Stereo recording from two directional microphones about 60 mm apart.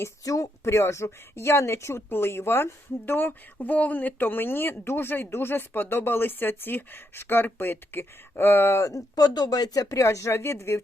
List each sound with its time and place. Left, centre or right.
0.6 s a woman's voice: left
8.8 s speech: left
10.0 s speech: left